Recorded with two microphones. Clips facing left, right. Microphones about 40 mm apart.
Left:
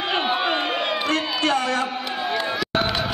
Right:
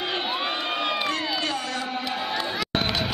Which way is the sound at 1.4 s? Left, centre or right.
Left.